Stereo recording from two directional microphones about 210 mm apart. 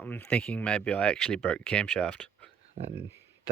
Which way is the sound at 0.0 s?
5° left (ahead or behind).